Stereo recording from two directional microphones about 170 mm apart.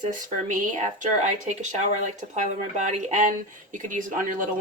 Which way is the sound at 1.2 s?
45° right (ahead or behind).